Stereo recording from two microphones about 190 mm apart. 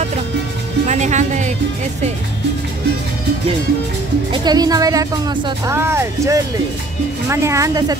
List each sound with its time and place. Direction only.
0.8 s music: 40° right (ahead or behind)
4.3 s speech: 20° right (ahead or behind)